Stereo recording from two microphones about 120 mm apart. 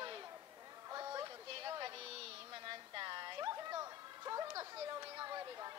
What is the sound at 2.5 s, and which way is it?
Music, 40° right (ahead or behind).